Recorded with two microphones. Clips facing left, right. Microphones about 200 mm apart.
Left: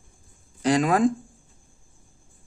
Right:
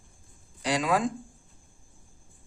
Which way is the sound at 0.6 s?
50° left (ahead or behind).